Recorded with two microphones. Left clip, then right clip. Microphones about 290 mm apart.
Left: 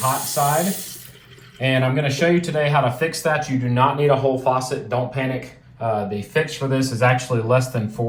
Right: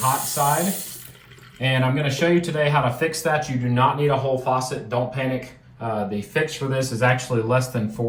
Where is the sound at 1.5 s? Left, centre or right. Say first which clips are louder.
Left 2 dB; centre.